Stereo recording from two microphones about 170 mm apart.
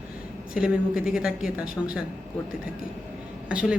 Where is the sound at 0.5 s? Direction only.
5° right (ahead or behind).